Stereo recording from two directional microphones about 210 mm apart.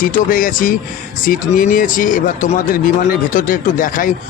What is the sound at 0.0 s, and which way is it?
Speech, 40° left (ahead or behind).